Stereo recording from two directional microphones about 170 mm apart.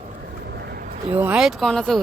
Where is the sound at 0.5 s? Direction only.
70° right (ahead or behind).